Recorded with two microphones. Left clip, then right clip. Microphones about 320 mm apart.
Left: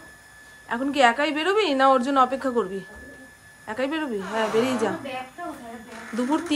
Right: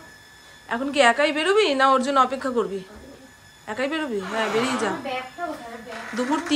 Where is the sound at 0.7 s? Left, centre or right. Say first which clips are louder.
Right 1 dB; centre.